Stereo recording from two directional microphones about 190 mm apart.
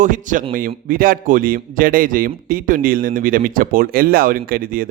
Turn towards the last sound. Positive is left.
turn(degrees=-50)  # may be behind; listen again after turning